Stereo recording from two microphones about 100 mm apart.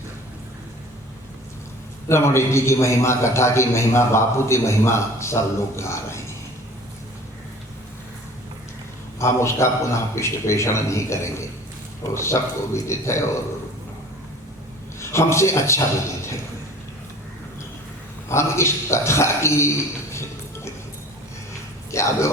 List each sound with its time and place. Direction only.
2.0 s a man's voice: 25° left (ahead or behind)
9.1 s a man's voice: 30° left (ahead or behind)
15.1 s a man's voice: 30° left (ahead or behind)
18.3 s a man's voice: 25° left (ahead or behind)
21.9 s a man's voice: 30° left (ahead or behind)